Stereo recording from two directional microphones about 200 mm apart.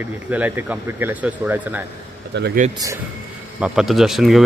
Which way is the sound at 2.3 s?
60° right (ahead or behind).